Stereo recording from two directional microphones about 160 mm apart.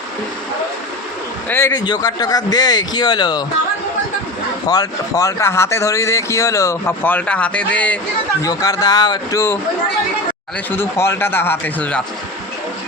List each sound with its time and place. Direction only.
1.5 s speech: 15° left (ahead or behind)
1.8 s speech: 25° left (ahead or behind)
4.7 s speech: 20° left (ahead or behind)
8.4 s speech: 25° left (ahead or behind)
10.7 s speech: 15° left (ahead or behind)